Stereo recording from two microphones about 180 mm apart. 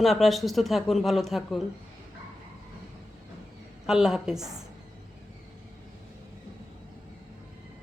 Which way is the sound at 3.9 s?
Centre (ahead or behind).